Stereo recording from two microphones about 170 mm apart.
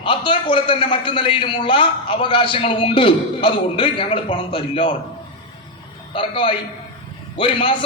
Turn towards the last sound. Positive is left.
turn(degrees=30)  # may be behind; listen again after turning